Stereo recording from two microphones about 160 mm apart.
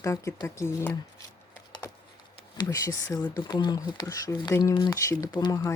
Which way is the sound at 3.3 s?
25° left (ahead or behind).